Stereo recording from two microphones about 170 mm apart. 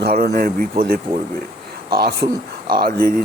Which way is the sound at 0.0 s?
65° right (ahead or behind).